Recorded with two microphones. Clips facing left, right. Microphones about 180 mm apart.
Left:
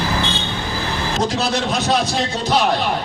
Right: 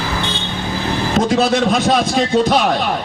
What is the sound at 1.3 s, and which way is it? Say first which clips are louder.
Speech: right 6 dB; 55° right (ahead or behind).